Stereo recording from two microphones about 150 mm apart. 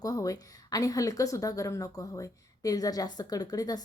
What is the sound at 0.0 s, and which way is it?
A woman's voice, 25° left (ahead or behind).